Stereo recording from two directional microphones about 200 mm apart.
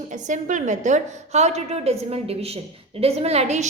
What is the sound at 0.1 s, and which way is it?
A woman's voice, 40° right (ahead or behind).